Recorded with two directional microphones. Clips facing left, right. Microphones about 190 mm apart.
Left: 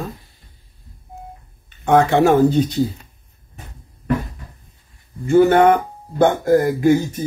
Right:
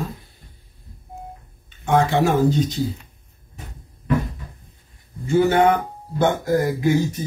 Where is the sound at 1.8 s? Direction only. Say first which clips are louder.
Left 4 dB; 55° left (ahead or behind).